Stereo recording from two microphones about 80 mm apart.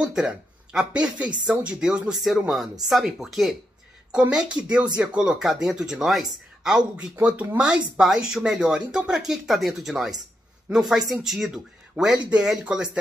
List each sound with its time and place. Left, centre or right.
0.0 s speech: centre